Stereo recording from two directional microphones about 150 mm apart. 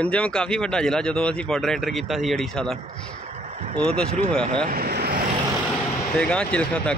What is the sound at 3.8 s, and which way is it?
Speech, 5° left (ahead or behind).